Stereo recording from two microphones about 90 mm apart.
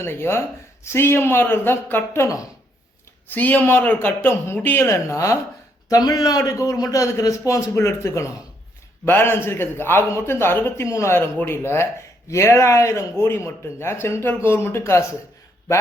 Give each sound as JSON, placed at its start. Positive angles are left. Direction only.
{"t": 0.0, "sound": "a man's voice", "side_deg": 25}
{"t": 2.2, "sound": "a man's voice", "side_deg": 40}
{"t": 3.2, "sound": "a man's voice", "side_deg": 20}
{"t": 4.9, "sound": "a man's voice", "side_deg": 35}
{"t": 5.9, "sound": "a man's voice", "side_deg": 45}